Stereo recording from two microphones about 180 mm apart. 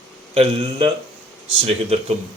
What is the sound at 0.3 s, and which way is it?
A man's voice, 30° right (ahead or behind).